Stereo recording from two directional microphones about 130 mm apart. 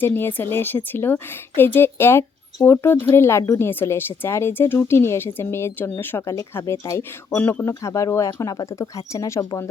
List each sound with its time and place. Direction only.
0.0 s a woman's voice: 15° left (ahead or behind)